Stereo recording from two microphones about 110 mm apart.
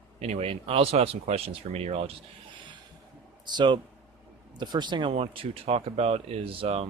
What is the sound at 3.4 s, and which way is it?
Speech, 45° right (ahead or behind).